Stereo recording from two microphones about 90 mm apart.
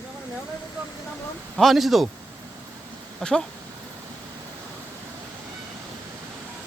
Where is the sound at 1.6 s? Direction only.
Centre (ahead or behind).